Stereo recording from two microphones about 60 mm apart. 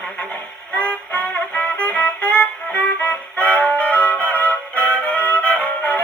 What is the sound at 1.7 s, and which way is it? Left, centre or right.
Music, left.